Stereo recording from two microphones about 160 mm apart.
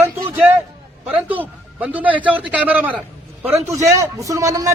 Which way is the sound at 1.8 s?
10° right (ahead or behind).